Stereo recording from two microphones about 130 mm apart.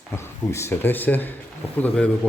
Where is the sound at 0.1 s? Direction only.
20° left (ahead or behind).